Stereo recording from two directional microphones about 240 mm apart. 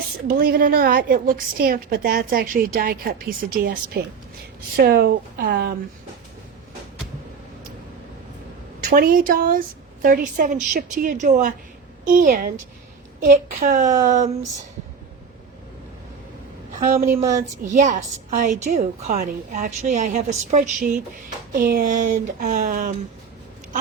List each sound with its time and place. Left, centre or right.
0.3 s a woman's voice: right
8.9 s a woman's voice: right
13.8 s speech: centre
14.1 s a woman's voice: right
17.3 s a woman's voice: right